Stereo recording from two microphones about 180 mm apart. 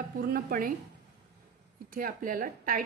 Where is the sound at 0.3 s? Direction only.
50° right (ahead or behind).